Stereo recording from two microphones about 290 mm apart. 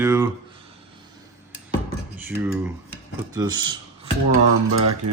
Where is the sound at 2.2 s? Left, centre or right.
Centre.